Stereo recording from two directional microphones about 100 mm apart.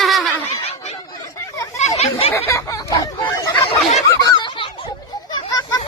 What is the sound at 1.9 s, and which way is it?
Chatter, 85° left.